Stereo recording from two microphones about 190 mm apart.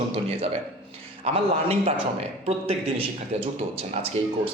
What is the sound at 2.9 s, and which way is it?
A man's voice, 30° right (ahead or behind).